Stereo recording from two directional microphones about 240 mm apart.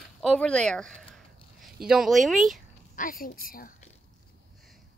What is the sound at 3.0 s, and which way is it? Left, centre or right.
Speech, left.